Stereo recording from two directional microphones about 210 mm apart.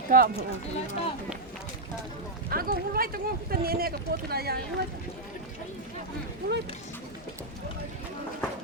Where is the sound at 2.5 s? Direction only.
45° right (ahead or behind).